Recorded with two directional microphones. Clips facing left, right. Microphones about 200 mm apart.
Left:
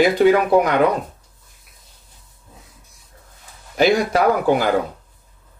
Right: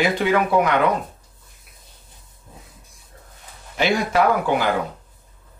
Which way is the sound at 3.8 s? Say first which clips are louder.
Left 3 dB; 40° left (ahead or behind).